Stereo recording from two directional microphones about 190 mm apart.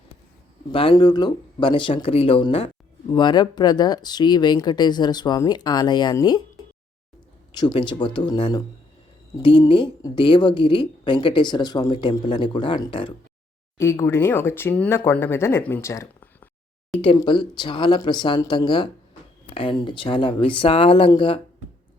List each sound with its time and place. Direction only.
0.7 s a woman's voice: 30° left (ahead or behind)
7.5 s a woman's voice: 20° left (ahead or behind)
13.7 s speech: 15° left (ahead or behind)
17.0 s a woman's voice: 25° left (ahead or behind)